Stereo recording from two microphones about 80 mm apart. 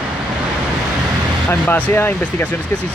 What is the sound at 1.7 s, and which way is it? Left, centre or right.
Speech, left.